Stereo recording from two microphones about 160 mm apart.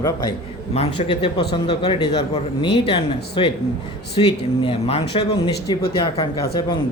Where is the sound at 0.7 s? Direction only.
35° left (ahead or behind).